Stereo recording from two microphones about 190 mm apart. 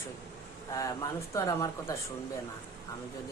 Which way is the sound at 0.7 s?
15° left (ahead or behind).